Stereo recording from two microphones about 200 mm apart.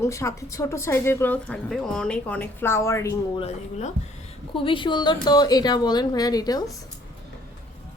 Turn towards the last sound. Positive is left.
turn(degrees=20)  # may be behind; listen again after turning